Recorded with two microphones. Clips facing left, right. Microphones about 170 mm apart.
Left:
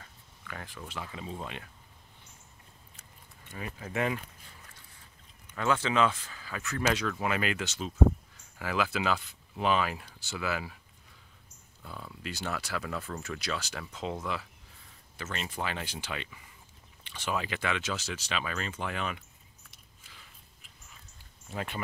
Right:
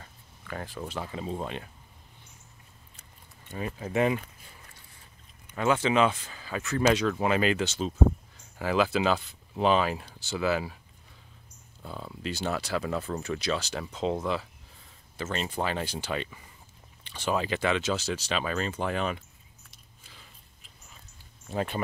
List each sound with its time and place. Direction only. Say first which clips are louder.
0.0 s speech: right 2 dB; 35° right (ahead or behind)
3.4 s speech: right 6 dB; 30° right (ahead or behind)
5.5 s speech: right 4 dB; 20° right (ahead or behind)
11.8 s speech: right 5 dB; 30° right (ahead or behind)
21.5 s speech: right 6 dB; 35° right (ahead or behind)